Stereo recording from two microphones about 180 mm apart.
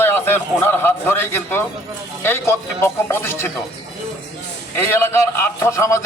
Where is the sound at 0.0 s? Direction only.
10° left (ahead or behind).